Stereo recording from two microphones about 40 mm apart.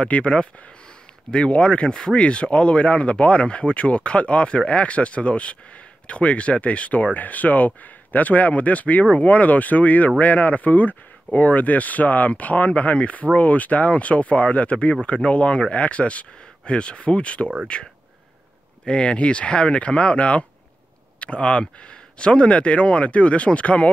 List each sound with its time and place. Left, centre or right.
0.2 s speech: left